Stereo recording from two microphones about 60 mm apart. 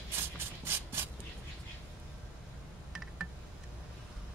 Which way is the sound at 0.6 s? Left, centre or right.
Right.